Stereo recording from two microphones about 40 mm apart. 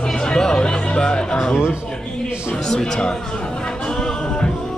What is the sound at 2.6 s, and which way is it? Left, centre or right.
Speech, centre.